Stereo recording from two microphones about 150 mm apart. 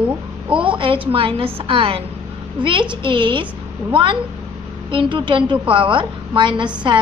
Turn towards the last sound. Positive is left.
turn(degrees=-30)  # may be behind; listen again after turning